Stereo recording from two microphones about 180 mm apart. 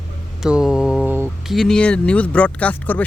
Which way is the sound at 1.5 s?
Centre (ahead or behind).